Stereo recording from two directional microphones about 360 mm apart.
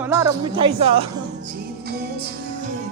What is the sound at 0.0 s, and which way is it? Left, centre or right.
Speech, centre.